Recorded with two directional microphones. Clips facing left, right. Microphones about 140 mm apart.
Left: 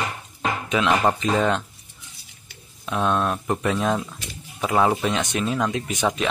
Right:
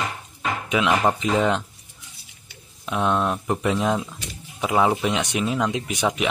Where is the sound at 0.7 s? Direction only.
10° right (ahead or behind).